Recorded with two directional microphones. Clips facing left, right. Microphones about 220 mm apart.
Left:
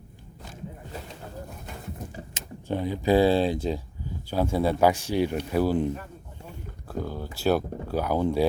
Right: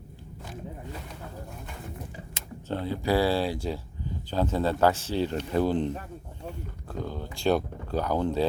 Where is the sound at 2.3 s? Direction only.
15° left (ahead or behind).